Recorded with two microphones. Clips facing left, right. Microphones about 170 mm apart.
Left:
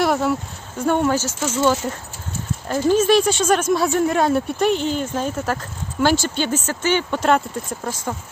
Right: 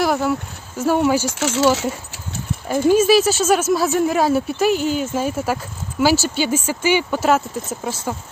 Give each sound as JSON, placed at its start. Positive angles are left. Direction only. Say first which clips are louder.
{"t": 0.0, "sound": "a sound", "louder": "even", "side_deg": 0}
{"t": 0.8, "sound": "speech", "louder": "right 2 dB", "side_deg": -5}
{"t": 1.4, "sound": "speech", "louder": "right 1 dB", "side_deg": -85}
{"t": 2.6, "sound": "speech", "louder": "right 2 dB", "side_deg": -10}